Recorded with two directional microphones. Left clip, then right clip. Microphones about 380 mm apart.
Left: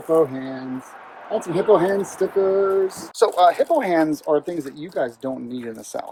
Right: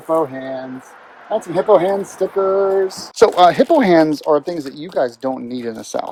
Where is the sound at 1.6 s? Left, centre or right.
Centre.